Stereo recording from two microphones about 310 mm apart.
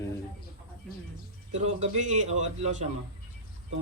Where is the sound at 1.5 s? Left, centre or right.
Right.